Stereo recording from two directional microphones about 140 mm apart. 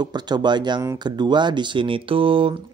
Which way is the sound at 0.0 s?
30° right (ahead or behind).